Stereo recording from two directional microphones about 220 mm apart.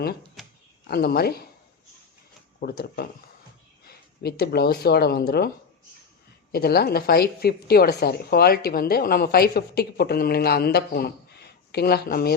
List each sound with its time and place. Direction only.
0.4 s a sound: centre (ahead or behind)
0.9 s speech: 45° left (ahead or behind)
2.6 s speech: 45° left (ahead or behind)
6.5 s speech: 45° left (ahead or behind)